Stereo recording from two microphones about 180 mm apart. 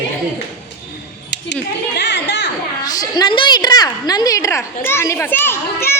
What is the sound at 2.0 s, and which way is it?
Children playing, 70° left (ahead or behind).